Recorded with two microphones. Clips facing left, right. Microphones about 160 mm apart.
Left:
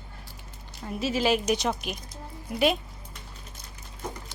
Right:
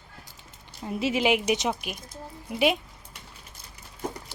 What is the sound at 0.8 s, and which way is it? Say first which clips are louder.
Speech: right 1 dB; 20° right (ahead or behind).